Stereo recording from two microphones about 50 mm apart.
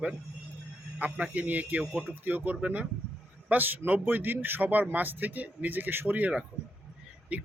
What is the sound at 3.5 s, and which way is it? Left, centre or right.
A man's voice, right.